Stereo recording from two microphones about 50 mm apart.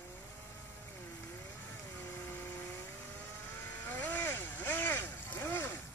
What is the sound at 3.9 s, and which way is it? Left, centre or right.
Vehicle, left.